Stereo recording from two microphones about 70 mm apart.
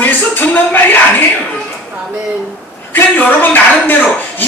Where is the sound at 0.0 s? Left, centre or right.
Left.